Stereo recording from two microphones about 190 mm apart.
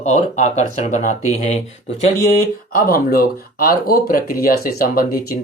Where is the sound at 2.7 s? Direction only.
50° left (ahead or behind).